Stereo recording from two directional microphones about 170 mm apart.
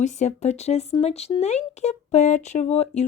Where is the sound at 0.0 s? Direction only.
40° left (ahead or behind).